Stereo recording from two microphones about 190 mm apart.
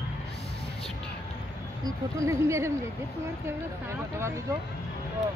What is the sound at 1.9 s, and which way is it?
Speech, 15° right (ahead or behind).